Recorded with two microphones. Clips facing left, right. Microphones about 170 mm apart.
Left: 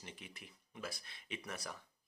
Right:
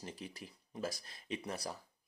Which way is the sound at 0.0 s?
35° right (ahead or behind).